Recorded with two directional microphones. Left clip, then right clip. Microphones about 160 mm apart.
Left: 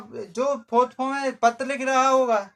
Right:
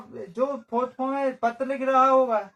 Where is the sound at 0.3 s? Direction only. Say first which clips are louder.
Left 5 dB; 25° left (ahead or behind).